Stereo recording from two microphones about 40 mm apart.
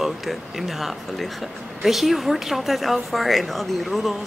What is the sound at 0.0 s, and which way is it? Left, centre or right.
A woman's voice, centre.